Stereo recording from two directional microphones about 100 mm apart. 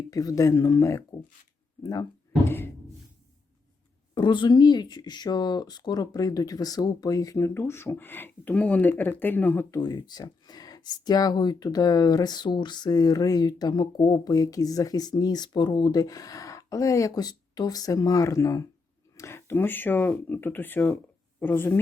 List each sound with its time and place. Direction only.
0.1 s speech: 35° left (ahead or behind)
4.1 s speech: 50° left (ahead or behind); by 9.6 s 20° left (ahead or behind)
9.8 s speech: 45° left (ahead or behind); by 21.8 s 20° left (ahead or behind)